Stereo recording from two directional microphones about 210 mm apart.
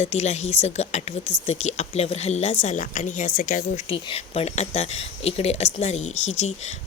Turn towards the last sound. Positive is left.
turn(degrees=70)  # may be behind; listen again after turning